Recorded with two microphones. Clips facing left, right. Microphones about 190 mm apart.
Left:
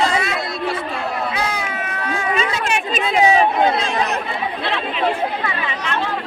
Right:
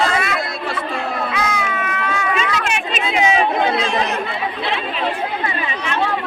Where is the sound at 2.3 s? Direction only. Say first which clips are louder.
Even; 35° left (ahead or behind).